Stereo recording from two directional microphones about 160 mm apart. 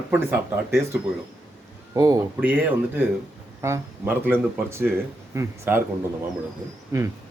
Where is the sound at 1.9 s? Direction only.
20° right (ahead or behind).